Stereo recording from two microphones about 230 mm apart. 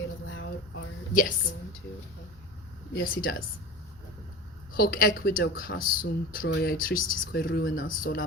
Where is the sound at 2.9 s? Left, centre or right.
Left.